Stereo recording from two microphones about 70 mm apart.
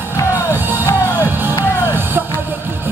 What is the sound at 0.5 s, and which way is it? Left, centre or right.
Music, right.